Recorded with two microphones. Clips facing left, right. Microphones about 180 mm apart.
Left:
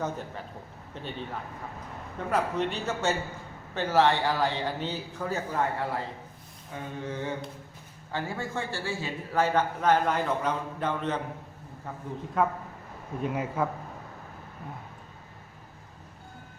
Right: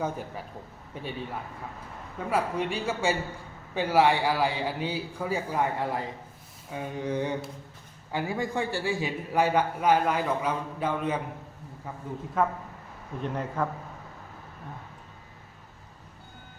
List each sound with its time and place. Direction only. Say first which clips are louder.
0.0 s a man's voice: right 1 dB; 10° right (ahead or behind)
12.4 s a man's voice: even; centre (ahead or behind)